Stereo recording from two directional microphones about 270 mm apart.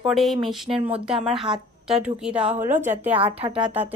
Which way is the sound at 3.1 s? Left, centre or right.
Centre.